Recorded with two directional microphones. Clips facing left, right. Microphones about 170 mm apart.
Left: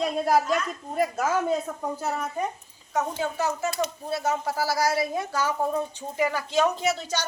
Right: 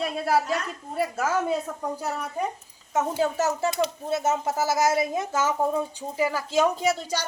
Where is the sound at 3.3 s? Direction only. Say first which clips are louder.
Right 2 dB; 40° right (ahead or behind).